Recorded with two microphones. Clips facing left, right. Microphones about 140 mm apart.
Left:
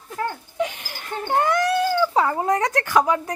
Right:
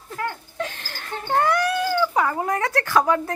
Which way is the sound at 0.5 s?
15° left (ahead or behind).